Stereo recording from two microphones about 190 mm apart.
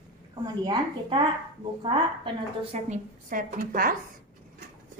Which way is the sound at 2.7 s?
35° right (ahead or behind).